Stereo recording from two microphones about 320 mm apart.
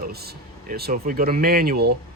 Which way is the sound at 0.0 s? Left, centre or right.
Right.